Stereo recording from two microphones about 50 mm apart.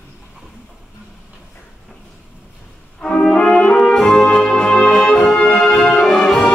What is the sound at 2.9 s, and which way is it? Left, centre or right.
Brass instrument, left.